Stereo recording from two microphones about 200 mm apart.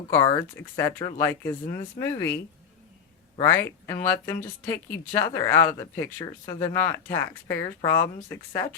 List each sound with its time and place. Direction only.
0.3 s speech: 15° left (ahead or behind)
3.4 s speech: 15° left (ahead or behind)